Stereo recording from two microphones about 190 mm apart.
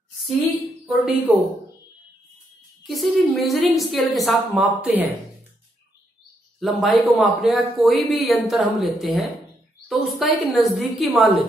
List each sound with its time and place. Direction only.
0.8 s a woman's voice: 10° right (ahead or behind)
2.8 s speech: centre (ahead or behind)
6.6 s speech: centre (ahead or behind)